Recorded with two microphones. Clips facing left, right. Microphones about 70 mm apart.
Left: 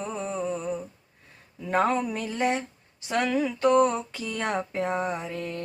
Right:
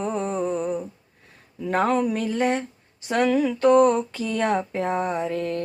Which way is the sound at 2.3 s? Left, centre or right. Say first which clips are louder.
Right 3 dB; right.